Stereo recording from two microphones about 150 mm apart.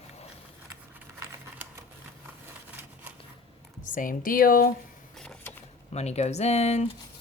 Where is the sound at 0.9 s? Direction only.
15° right (ahead or behind).